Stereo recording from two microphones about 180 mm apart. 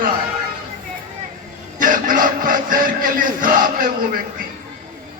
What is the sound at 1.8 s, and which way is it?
Chant, 50° right (ahead or behind).